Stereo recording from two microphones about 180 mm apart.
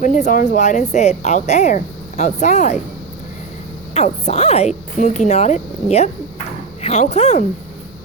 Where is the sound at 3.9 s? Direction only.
35° left (ahead or behind).